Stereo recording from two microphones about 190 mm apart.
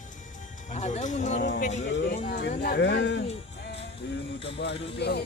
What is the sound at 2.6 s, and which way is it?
Speech, 60° left (ahead or behind).